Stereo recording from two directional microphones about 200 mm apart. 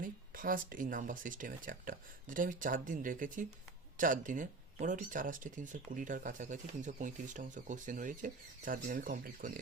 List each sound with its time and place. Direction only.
0.0 s speech: 45° right (ahead or behind)